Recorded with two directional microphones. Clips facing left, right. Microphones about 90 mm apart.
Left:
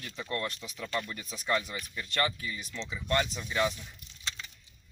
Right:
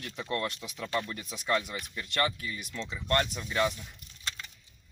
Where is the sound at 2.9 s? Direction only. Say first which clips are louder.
Right 1 dB; 5° left (ahead or behind).